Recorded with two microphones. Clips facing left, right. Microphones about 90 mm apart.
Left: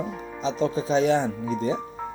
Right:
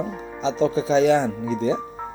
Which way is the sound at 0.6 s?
90° right.